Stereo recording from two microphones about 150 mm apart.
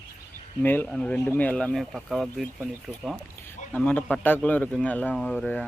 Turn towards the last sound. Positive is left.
turn(degrees=5)  # may be behind; listen again after turning